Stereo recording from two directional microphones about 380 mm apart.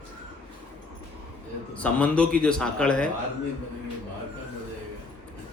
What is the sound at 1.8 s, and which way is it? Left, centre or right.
A man's voice, centre.